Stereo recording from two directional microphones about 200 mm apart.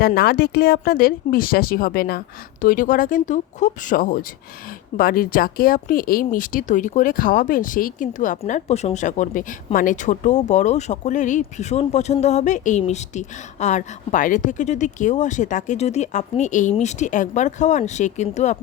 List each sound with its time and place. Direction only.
0.0 s speech: 50° left (ahead or behind)